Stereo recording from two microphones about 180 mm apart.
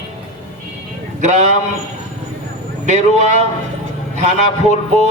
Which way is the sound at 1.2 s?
40° right (ahead or behind).